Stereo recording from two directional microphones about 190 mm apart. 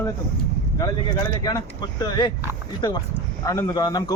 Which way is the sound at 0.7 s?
20° left (ahead or behind).